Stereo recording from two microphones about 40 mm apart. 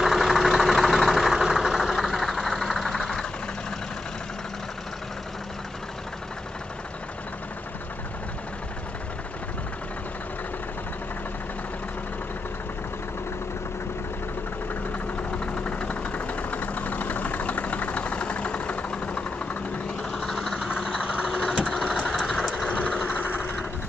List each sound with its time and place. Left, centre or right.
0.0 s vehicle: centre
15.3 s vehicle: left
20.0 s vehicle: centre
22.7 s vehicle: left
23.1 s vehicle: left